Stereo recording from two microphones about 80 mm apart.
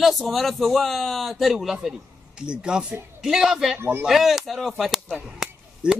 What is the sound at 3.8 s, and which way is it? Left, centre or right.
Speech, right.